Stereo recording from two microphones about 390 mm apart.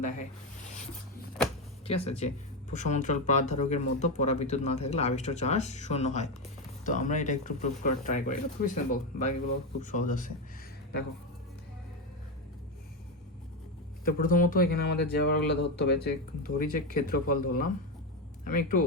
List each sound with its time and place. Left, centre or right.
1.9 s speech: centre
14.0 s speech: left